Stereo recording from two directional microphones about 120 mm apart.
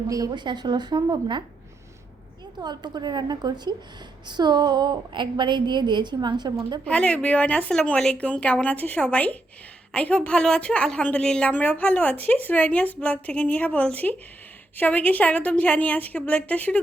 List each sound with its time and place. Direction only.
0.1 s a woman's voice: 35° right (ahead or behind)
2.6 s a woman's voice: 35° right (ahead or behind)
6.8 s a woman's voice: 10° left (ahead or behind)